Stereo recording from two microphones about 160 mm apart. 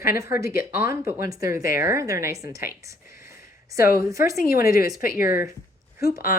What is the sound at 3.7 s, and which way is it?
Speech, 70° left (ahead or behind).